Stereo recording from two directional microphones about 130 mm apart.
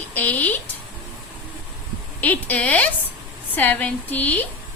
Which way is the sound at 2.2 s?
15° left (ahead or behind).